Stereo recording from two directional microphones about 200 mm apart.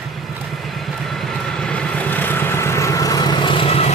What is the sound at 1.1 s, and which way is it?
Vehicle, centre (ahead or behind).